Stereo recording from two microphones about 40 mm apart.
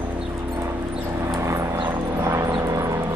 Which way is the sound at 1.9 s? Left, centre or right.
Right.